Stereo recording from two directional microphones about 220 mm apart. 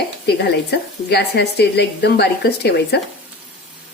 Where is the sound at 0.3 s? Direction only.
50° left (ahead or behind).